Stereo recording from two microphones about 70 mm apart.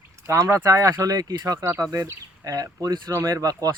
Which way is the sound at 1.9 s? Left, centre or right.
Right.